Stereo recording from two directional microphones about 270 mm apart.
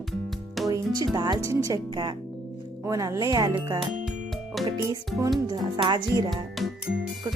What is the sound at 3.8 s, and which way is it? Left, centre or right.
Music, centre.